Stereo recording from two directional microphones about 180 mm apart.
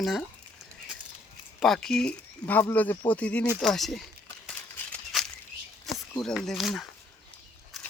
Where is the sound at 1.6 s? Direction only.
Centre (ahead or behind).